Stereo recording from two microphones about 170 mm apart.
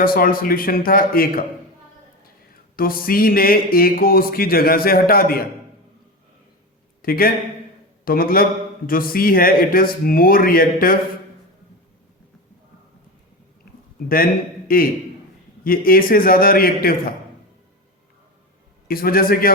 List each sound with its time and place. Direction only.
0.0 s speech: 55° left (ahead or behind)
2.7 s speech: 60° left (ahead or behind)
7.0 s a man's voice: 60° left (ahead or behind)
14.7 s speech: 55° left (ahead or behind)
18.9 s speech: 60° left (ahead or behind)